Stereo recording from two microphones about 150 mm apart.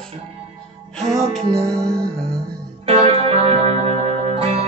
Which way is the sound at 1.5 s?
5° left (ahead or behind).